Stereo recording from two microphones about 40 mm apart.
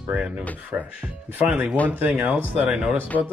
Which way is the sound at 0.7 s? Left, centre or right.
Right.